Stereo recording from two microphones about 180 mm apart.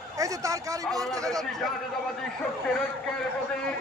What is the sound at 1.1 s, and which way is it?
Speech, 20° right (ahead or behind).